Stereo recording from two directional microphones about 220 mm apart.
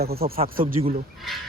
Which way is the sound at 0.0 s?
45° right (ahead or behind).